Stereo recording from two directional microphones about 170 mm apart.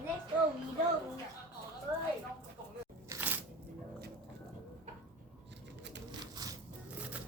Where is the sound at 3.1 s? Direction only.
10° right (ahead or behind).